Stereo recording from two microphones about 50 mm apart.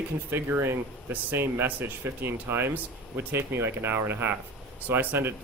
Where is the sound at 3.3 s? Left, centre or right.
Right.